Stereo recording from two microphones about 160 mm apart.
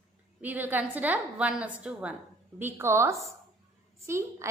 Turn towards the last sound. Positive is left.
turn(degrees=-15)  # may be behind; listen again after turning